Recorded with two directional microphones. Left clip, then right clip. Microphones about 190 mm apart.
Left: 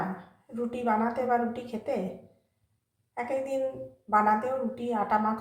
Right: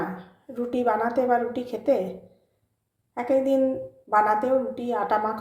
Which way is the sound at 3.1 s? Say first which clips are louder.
Right 8 dB; 35° right (ahead or behind).